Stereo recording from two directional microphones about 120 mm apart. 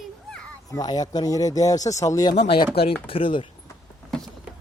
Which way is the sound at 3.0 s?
50° left (ahead or behind).